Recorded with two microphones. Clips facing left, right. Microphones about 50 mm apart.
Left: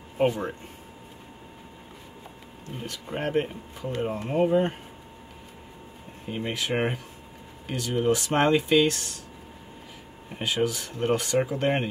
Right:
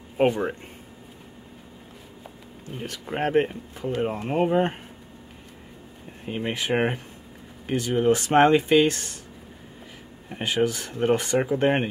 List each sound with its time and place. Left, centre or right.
0.2 s speech: centre
2.8 s speech: right
6.2 s speech: right
10.4 s speech: right